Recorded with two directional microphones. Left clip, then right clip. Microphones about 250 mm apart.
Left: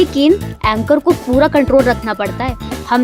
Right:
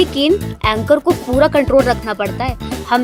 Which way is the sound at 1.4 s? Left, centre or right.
Centre.